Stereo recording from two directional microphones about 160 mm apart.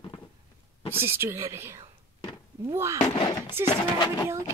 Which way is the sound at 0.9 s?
15° right (ahead or behind).